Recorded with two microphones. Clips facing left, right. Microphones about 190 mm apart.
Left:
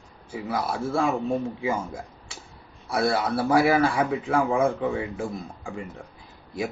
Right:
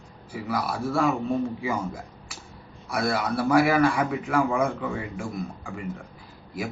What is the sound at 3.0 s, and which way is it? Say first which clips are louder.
Speech: left 2 dB; 25° left (ahead or behind).